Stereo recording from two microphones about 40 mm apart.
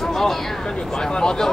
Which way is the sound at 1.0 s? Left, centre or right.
Centre.